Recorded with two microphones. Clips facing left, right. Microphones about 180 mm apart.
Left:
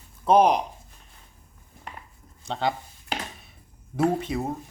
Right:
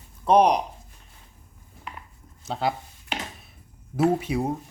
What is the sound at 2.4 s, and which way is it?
Speech, 5° right (ahead or behind).